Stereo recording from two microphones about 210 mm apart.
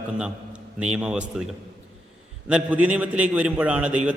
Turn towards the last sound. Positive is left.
turn(degrees=-5)  # may be behind; listen again after turning